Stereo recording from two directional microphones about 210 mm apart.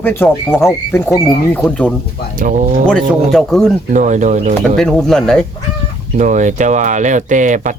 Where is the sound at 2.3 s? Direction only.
40° right (ahead or behind).